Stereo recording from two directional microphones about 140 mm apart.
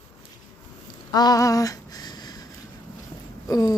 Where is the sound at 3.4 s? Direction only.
25° left (ahead or behind).